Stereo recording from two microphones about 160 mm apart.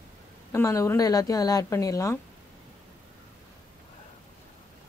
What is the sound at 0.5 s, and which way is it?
A woman's voice, 20° left (ahead or behind).